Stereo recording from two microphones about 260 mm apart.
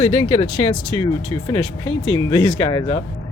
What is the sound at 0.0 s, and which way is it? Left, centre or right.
Speech, left.